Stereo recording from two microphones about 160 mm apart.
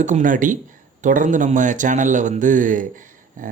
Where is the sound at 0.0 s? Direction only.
50° right (ahead or behind).